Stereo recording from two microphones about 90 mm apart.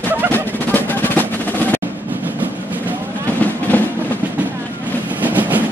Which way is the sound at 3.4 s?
20° left (ahead or behind).